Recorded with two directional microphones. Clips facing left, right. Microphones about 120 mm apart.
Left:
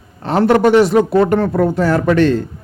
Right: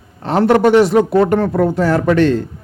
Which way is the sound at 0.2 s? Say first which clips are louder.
Even; 20° right (ahead or behind).